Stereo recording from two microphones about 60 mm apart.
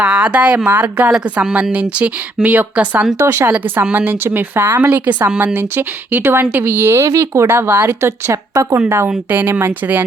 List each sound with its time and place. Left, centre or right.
0.0 s speech: right
3.2 s speech: right
3.5 s speech: right
9.3 s speech: right